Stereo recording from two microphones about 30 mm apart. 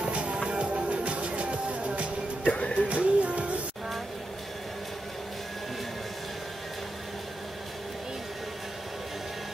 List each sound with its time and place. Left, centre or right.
0.0 s music: right
2.4 s music: left
2.9 s music: right